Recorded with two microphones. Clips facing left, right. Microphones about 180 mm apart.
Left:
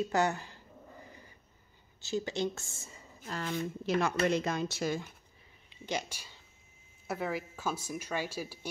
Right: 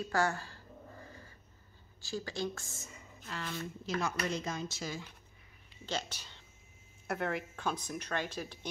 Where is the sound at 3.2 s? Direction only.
50° left (ahead or behind).